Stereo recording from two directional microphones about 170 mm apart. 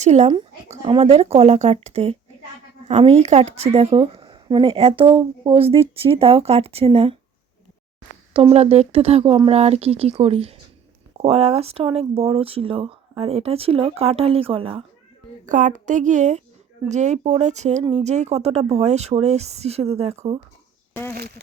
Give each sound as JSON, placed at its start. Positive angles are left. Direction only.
{"t": 0.0, "sound": "a woman's voice", "side_deg": -40}
{"t": 8.3, "sound": "a woman's voice", "side_deg": -35}
{"t": 15.4, "sound": "a woman's voice", "side_deg": -45}
{"t": 21.2, "sound": "speech", "side_deg": -70}